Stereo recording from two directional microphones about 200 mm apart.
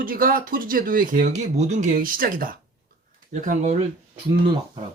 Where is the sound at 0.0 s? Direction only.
45° right (ahead or behind).